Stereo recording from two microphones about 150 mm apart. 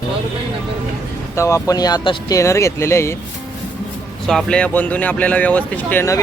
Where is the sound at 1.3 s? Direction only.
20° left (ahead or behind).